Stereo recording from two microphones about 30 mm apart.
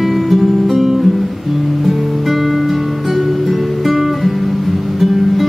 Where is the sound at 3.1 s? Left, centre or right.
Centre.